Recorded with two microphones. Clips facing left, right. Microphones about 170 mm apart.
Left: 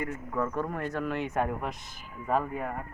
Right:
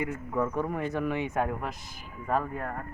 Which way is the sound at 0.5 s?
10° right (ahead or behind).